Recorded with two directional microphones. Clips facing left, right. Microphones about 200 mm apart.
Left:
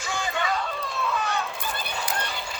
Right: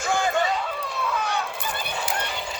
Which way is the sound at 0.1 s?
50° right (ahead or behind).